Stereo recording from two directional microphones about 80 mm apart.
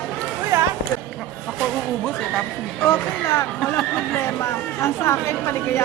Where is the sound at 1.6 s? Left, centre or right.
Centre.